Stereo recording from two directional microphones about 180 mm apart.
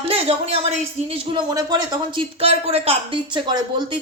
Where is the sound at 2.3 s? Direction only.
35° right (ahead or behind).